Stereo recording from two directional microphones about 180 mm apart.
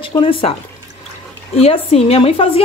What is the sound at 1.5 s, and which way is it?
Speech, 35° left (ahead or behind).